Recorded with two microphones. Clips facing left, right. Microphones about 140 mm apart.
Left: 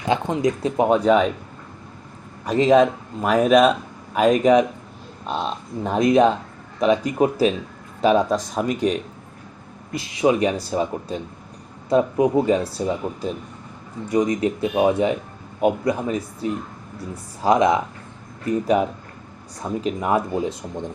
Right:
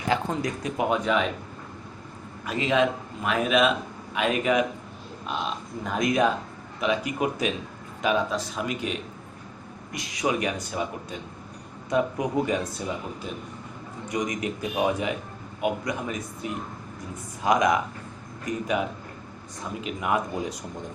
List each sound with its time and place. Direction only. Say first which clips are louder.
0.1 s speech: left 6 dB; 20° left (ahead or behind)
0.8 s speech: left 8 dB; 35° left (ahead or behind)
2.5 s speech: left 8 dB; 40° left (ahead or behind)
9.9 s speech: left 8 dB; 30° left (ahead or behind)
14.1 s speech: left 9 dB; 30° left (ahead or behind)